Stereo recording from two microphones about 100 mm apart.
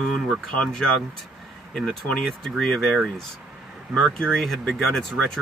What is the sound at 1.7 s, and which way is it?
Speech, 5° left (ahead or behind).